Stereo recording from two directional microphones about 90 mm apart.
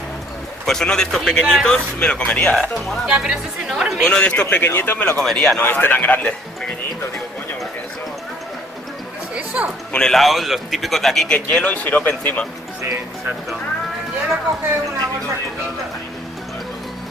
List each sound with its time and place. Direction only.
0.7 s a man's voice: 5° left (ahead or behind)
3.1 s a man's voice: 10° right (ahead or behind)
4.1 s a man's voice: 10° left (ahead or behind)
5.1 s a man's voice: 5° left (ahead or behind)
5.6 s a man's voice: 25° left (ahead or behind)
9.3 s a sound: 15° right (ahead or behind)
9.9 s a man's voice: 5° left (ahead or behind)
11.2 s a man's voice: 15° left (ahead or behind)